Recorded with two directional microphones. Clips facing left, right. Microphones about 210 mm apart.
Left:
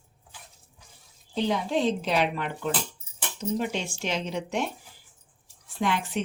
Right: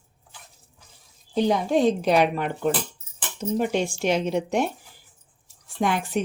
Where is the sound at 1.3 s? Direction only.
45° right (ahead or behind).